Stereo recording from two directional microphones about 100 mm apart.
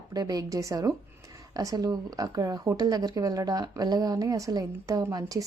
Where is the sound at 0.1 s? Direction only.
40° right (ahead or behind).